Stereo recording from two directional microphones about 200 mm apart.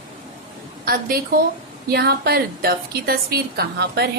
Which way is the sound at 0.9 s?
45° right (ahead or behind).